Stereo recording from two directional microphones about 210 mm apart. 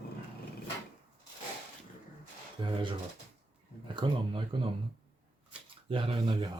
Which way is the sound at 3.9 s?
25° right (ahead or behind).